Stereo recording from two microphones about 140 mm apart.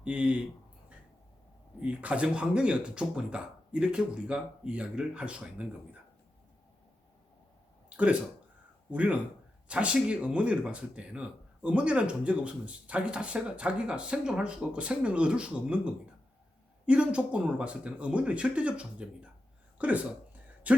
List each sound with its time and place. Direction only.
0.0 s speech: 10° right (ahead or behind)
1.8 s speech: 10° right (ahead or behind)
7.9 s a sound: 10° right (ahead or behind)
8.9 s speech: 10° right (ahead or behind)